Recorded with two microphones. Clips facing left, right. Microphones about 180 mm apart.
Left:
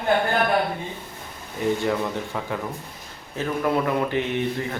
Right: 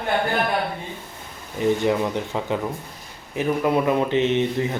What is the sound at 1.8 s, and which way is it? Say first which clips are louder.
Speech: right 3 dB; 20° right (ahead or behind).